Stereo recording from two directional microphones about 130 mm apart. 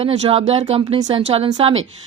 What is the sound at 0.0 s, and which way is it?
Speech, 55° right (ahead or behind).